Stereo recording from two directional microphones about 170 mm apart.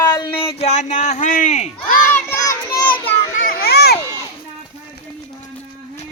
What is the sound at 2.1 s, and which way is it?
Child singing, 15° left (ahead or behind).